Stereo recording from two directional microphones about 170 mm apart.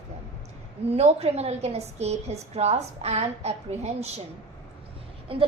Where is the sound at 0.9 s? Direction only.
40° right (ahead or behind).